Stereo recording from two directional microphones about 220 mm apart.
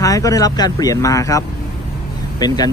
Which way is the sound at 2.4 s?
20° left (ahead or behind).